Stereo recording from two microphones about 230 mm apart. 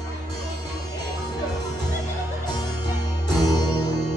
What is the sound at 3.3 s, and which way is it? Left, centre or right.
Music, centre.